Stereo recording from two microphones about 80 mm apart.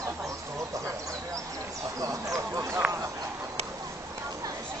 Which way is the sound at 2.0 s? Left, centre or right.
Right.